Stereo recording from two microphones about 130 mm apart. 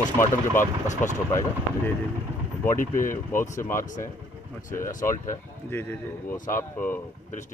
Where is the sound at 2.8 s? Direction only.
90° left.